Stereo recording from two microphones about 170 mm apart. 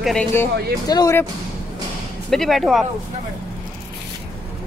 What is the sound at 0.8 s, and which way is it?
Speech, 20° left (ahead or behind).